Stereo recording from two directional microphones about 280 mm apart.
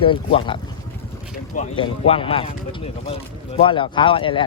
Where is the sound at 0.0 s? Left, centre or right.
Centre.